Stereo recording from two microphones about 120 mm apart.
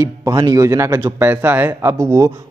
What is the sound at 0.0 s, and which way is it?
A man's voice, 30° right (ahead or behind).